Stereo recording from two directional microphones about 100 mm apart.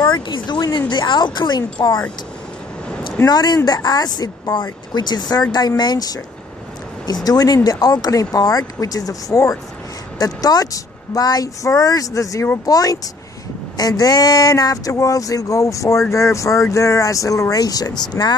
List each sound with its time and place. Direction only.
0.0 s speech: 45° left (ahead or behind)
3.3 s speech: 40° left (ahead or behind)
7.2 s speech: 40° left (ahead or behind)